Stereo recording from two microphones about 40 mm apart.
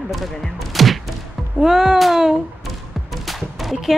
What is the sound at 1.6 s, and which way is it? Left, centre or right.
Speech, centre.